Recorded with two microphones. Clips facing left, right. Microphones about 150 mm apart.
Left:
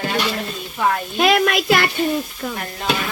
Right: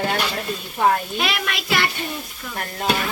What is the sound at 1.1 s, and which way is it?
Speech, 45° left (ahead or behind).